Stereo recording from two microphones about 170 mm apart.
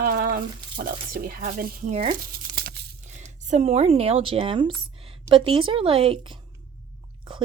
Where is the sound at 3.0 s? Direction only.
45° right (ahead or behind).